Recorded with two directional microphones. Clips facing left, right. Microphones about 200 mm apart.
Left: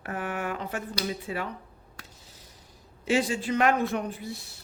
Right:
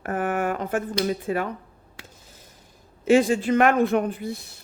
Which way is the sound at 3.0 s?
50° right (ahead or behind).